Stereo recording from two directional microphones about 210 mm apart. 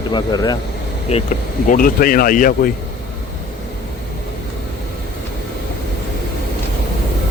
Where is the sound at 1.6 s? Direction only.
40° left (ahead or behind).